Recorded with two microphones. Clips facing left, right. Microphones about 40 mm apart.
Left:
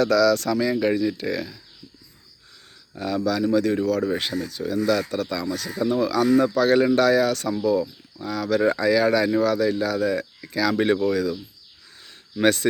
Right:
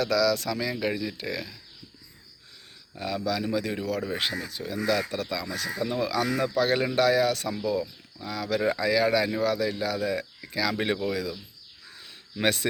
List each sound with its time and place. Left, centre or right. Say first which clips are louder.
0.0 s speech: left 6 dB; centre
0.6 s speech: left 8 dB; centre
3.0 s speech: left 6 dB; centre
5.7 s speech: left 6 dB; centre
12.4 s speech: left 6 dB; centre